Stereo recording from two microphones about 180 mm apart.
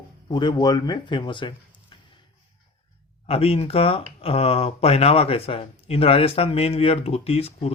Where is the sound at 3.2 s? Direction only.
35° left (ahead or behind).